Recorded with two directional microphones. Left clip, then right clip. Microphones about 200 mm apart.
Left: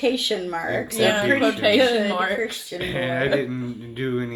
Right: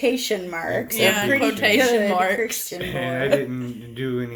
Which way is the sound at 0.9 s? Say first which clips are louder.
Even; 50° right (ahead or behind).